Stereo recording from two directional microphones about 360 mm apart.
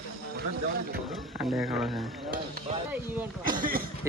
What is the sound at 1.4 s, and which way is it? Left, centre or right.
Speech, centre.